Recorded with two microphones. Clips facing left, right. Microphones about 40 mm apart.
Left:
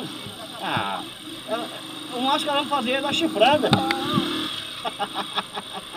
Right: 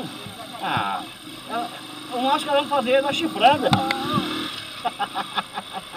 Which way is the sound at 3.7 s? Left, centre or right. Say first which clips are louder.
Even; right.